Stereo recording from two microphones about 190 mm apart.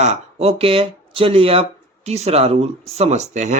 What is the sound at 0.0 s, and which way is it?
Speech, 35° right (ahead or behind).